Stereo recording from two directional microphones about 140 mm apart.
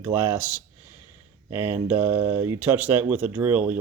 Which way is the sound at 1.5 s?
15° right (ahead or behind).